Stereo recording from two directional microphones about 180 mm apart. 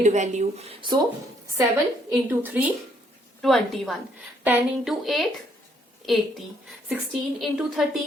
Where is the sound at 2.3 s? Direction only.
10° right (ahead or behind).